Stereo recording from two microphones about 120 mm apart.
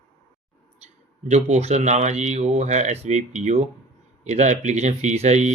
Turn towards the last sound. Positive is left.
turn(degrees=-70)  # may be behind; listen again after turning